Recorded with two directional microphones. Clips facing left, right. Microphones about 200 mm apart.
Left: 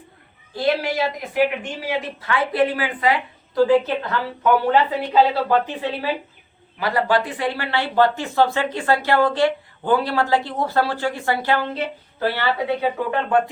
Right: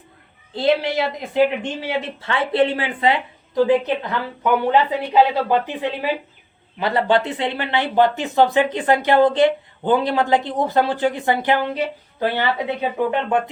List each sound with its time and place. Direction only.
0.5 s speech: 20° right (ahead or behind)